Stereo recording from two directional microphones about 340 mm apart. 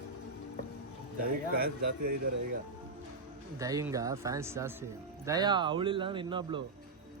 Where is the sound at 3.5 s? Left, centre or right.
Centre.